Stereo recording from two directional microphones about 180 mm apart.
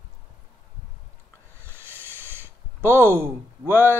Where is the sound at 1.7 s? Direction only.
10° right (ahead or behind).